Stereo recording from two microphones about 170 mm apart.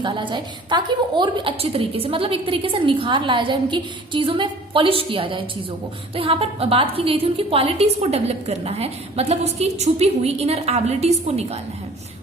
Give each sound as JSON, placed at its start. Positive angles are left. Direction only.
{"t": 0.0, "sound": "a woman's voice", "side_deg": -30}